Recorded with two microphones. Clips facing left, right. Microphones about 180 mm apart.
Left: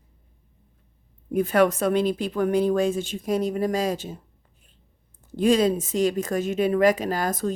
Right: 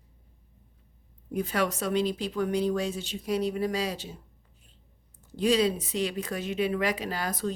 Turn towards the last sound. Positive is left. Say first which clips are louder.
# left 6 dB
turn(degrees=45)  # may be behind; listen again after turning